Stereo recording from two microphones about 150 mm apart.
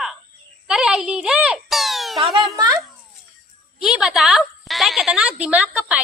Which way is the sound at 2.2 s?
30° right (ahead or behind).